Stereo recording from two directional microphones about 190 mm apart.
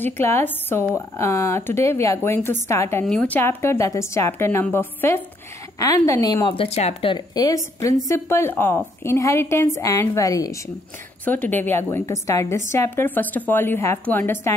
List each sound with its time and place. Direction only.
0.0 s speech: 10° left (ahead or behind)